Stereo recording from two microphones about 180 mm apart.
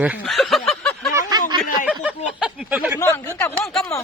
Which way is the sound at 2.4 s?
5° right (ahead or behind).